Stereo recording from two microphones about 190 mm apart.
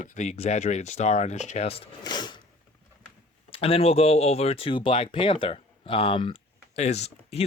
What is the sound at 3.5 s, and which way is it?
Speech, 30° left (ahead or behind).